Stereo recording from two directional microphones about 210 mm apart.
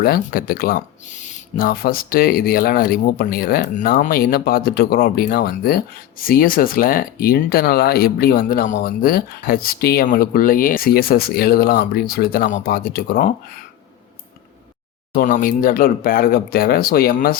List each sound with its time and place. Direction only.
0.0 s speech: 45° left (ahead or behind)
15.1 s speech: 40° left (ahead or behind)